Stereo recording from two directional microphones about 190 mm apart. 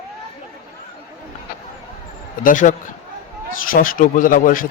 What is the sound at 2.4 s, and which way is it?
A man's voice, 45° left (ahead or behind).